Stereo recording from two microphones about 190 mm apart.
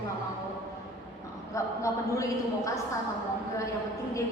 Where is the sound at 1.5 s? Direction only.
15° left (ahead or behind).